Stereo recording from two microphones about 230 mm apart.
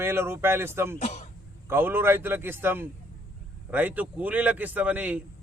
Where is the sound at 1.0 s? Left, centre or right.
Left.